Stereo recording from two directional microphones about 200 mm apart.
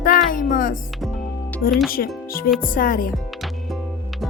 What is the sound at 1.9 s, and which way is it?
Speech, 45° left (ahead or behind).